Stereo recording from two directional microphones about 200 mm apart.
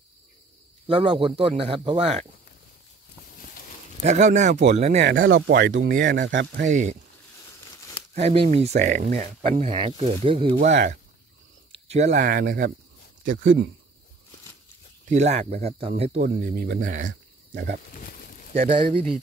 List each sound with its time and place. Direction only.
0.8 s speech: 25° right (ahead or behind)
4.0 s speech: 35° right (ahead or behind)
5.0 s speech: 75° right (ahead or behind)
6.7 s speech: 35° right (ahead or behind)
8.1 s speech: 30° right (ahead or behind)
11.9 s speech: 35° right (ahead or behind)
13.2 s speech: 70° right (ahead or behind)
15.0 s speech: 35° right (ahead or behind)
16.3 s speech: 50° right (ahead or behind)
17.1 s cricket: 60° right (ahead or behind)